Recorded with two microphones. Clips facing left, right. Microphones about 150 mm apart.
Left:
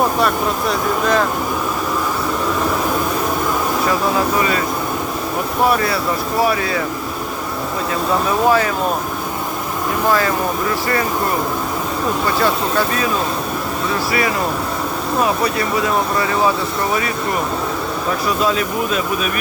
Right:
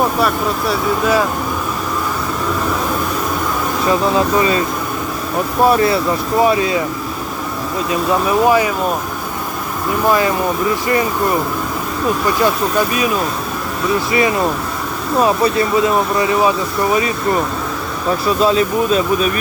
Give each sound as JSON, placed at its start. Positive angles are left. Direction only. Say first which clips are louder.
{"t": 0.2, "sound": "speech", "louder": "right 1 dB", "side_deg": -5}
{"t": 5.6, "sound": "speech", "louder": "right 4 dB", "side_deg": -25}
{"t": 8.4, "sound": "speech", "louder": "right 1 dB", "side_deg": -15}
{"t": 10.1, "sound": "speech", "louder": "right 2 dB", "side_deg": -15}
{"t": 14.1, "sound": "speech", "louder": "right 4 dB", "side_deg": -20}
{"t": 18.4, "sound": "speech", "louder": "right 7 dB", "side_deg": -30}